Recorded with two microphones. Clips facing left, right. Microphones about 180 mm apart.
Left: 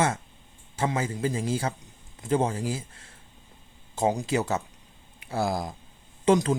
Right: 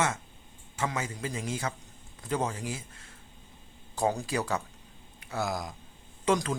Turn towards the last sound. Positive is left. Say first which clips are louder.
# left 6 dB
turn(degrees=30)  # may be behind; listen again after turning